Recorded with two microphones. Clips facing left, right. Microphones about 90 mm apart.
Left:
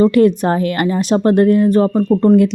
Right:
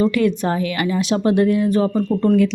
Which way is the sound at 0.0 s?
45° left (ahead or behind).